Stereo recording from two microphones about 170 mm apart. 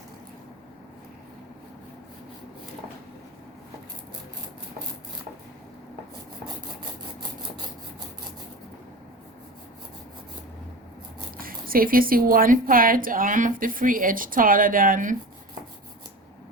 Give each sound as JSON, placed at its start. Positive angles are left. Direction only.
{"t": 11.3, "sound": "a woman's voice", "side_deg": -60}